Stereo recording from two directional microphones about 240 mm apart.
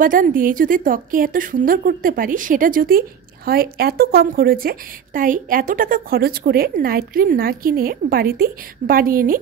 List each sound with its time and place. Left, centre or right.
0.0 s a woman's voice: right